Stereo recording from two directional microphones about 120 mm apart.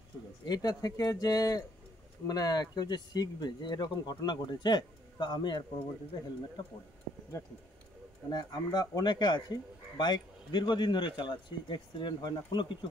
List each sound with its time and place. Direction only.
0.5 s a man's voice: 35° left (ahead or behind)
8.3 s a man's voice: 35° left (ahead or behind)